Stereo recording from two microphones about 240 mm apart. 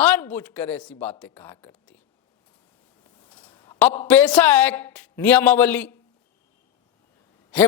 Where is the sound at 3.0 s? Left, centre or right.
Centre.